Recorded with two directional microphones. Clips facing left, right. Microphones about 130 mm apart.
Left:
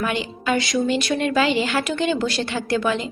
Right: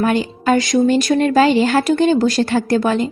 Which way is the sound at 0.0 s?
40° right (ahead or behind).